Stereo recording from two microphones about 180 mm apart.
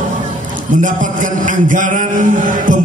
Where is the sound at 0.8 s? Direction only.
45° right (ahead or behind).